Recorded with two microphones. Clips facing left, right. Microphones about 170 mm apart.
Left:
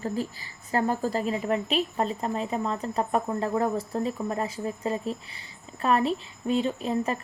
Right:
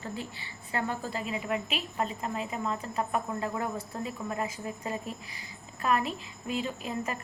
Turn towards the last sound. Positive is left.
turn(degrees=30)  # may be behind; listen again after turning